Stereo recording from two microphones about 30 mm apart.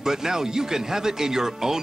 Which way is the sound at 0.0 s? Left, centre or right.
Centre.